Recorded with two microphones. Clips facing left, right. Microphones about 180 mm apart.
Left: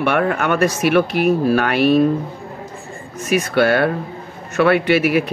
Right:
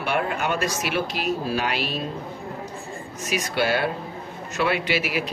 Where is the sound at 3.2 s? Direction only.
55° left (ahead or behind).